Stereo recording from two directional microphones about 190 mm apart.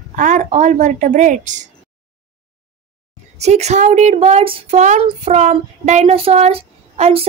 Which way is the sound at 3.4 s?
35° right (ahead or behind).